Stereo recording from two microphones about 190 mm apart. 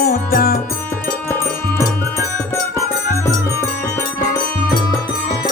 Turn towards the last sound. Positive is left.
turn(degrees=20)  # may be behind; listen again after turning